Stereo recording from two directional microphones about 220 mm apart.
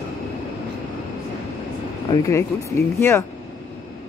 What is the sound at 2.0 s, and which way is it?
Speech, 10° left (ahead or behind).